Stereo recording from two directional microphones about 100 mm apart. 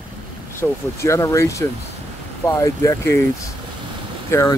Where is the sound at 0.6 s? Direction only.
30° left (ahead or behind).